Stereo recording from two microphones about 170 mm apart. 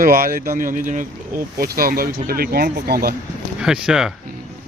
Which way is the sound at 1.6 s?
60° right (ahead or behind).